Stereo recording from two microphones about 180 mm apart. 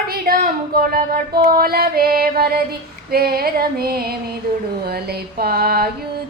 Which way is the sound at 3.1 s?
60° right (ahead or behind).